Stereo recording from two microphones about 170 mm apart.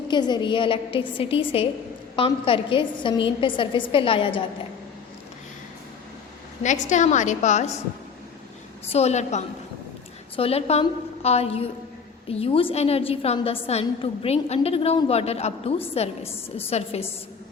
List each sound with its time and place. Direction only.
0.1 s a woman's voice: 25° left (ahead or behind)
6.6 s a woman's voice: 45° left (ahead or behind)
8.9 s a woman's voice: 40° left (ahead or behind)